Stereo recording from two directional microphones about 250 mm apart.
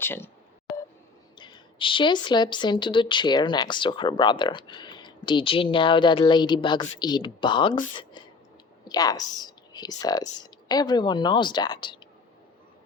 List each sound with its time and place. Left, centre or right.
0.0 s speech: centre
1.4 s speech: centre
8.8 s speech: centre